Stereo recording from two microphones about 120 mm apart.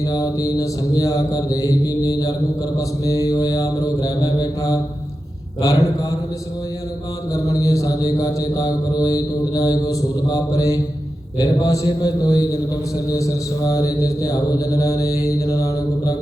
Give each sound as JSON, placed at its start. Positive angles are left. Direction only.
{"t": 0.0, "sound": "mantra", "side_deg": 30}
{"t": 7.3, "sound": "mantra", "side_deg": 30}